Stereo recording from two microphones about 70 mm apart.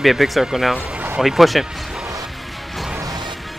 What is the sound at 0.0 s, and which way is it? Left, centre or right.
Speech, centre.